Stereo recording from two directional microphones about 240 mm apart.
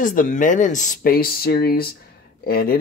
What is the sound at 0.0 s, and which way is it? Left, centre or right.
Speech, left.